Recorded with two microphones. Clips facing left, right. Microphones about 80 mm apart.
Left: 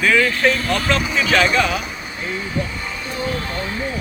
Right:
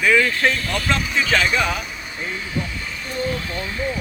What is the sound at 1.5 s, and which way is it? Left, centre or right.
Speech, centre.